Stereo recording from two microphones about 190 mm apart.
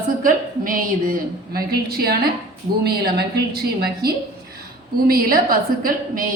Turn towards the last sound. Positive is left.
turn(degrees=-50)  # may be behind; listen again after turning